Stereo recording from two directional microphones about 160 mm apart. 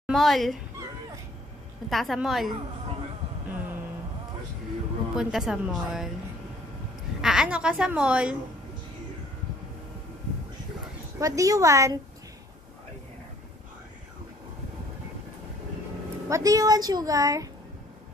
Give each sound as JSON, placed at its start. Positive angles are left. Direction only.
{"t": 0.0, "sound": "speech", "side_deg": 0}
{"t": 1.9, "sound": "a woman's voice", "side_deg": 0}
{"t": 3.4, "sound": "a sound", "side_deg": -10}
{"t": 5.1, "sound": "a woman's voice", "side_deg": -5}
{"t": 7.2, "sound": "a woman's voice", "side_deg": -5}
{"t": 11.1, "sound": "a woman's voice", "side_deg": -20}
{"t": 16.3, "sound": "a woman's voice", "side_deg": -20}